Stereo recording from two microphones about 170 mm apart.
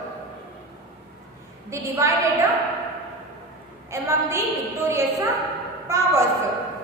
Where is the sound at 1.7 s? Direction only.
15° right (ahead or behind).